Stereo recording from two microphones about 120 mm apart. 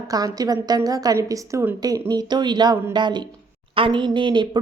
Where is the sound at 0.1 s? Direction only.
30° right (ahead or behind).